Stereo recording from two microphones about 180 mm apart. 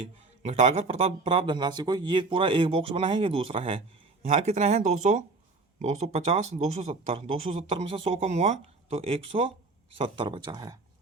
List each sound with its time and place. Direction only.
0.4 s speech: 35° right (ahead or behind)